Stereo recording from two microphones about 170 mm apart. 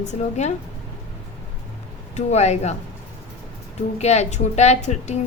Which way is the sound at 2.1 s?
40° left (ahead or behind).